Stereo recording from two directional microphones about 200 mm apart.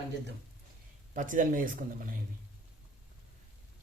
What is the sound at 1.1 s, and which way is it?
Speech, 40° right (ahead or behind).